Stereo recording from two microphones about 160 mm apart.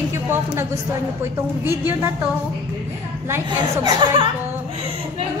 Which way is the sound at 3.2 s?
15° right (ahead or behind).